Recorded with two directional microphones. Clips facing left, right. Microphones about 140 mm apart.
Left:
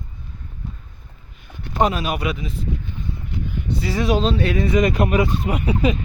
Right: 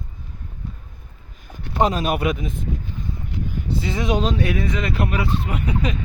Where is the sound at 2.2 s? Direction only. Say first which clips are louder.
Right 2 dB; 50° right (ahead or behind).